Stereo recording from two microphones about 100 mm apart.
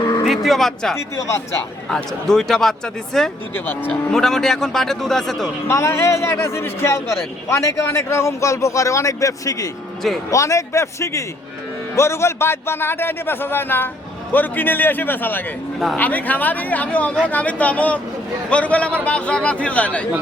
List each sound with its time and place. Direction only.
0.3 s speech: centre (ahead or behind)
0.9 s speech: 30° left (ahead or behind)
1.9 s speech: 5° left (ahead or behind)
3.5 s speech: 20° left (ahead or behind)
4.1 s speech: 5° left (ahead or behind)
5.6 s a man's voice: 25° left (ahead or behind)